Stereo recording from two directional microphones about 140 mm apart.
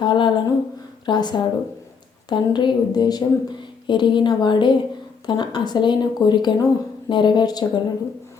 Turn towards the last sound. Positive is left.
turn(degrees=30)  # may be behind; listen again after turning